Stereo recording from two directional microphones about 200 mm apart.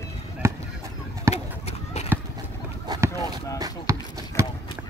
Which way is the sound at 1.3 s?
30° left (ahead or behind).